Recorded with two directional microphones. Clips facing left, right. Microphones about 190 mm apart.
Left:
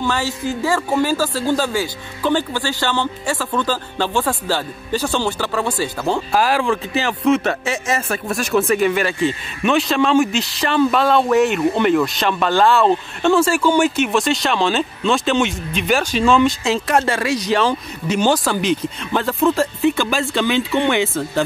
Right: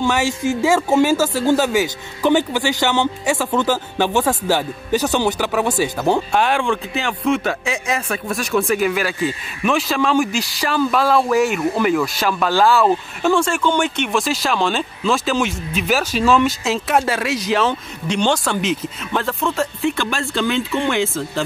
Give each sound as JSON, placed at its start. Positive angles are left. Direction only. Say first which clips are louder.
{"t": 0.0, "sound": "speech", "louder": "right 3 dB", "side_deg": -20}
{"t": 6.3, "sound": "speech", "louder": "left 1 dB", "side_deg": 0}